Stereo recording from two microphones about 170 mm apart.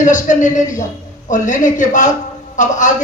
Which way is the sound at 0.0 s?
45° left (ahead or behind).